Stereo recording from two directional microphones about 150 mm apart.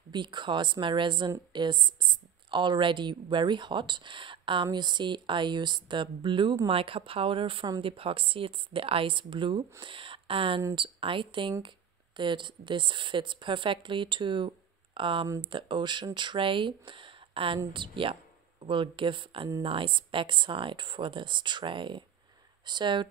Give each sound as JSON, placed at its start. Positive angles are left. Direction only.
{"t": 0.1, "sound": "speech", "side_deg": -30}